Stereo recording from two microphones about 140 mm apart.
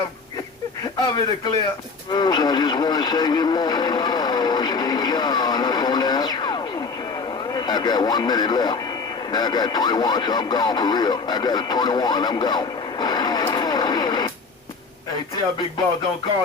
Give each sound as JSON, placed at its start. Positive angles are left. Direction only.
{"t": 2.1, "sound": "radio", "side_deg": 30}
{"t": 7.5, "sound": "speech", "side_deg": 30}